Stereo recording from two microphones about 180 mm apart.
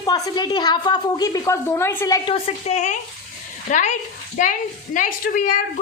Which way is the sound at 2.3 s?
35° left (ahead or behind).